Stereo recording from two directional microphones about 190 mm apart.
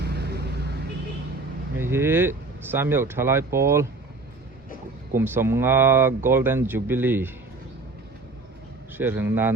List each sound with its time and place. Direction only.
0.0 s vehicle: 60° right (ahead or behind)
1.8 s speech: 10° right (ahead or behind)
5.1 s speech: 10° right (ahead or behind)
9.0 s speech: 10° right (ahead or behind)